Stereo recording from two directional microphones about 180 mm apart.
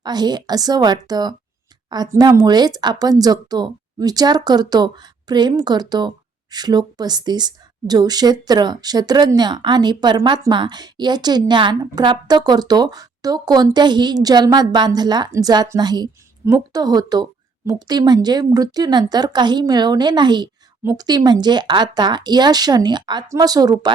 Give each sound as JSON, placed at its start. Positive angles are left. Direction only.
{"t": 0.0, "sound": "speech", "side_deg": -25}